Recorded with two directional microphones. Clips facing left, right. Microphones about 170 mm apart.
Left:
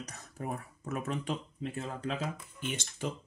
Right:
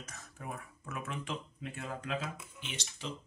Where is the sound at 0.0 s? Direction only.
35° left (ahead or behind).